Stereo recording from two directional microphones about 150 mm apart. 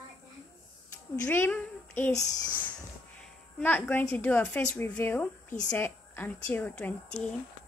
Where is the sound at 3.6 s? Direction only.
10° left (ahead or behind).